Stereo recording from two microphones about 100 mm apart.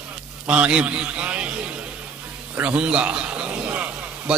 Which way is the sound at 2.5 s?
10° right (ahead or behind).